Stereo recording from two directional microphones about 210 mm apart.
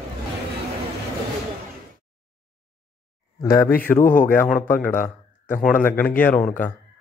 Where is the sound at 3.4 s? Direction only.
15° left (ahead or behind).